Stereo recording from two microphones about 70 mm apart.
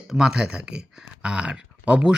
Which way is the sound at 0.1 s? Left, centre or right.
Centre.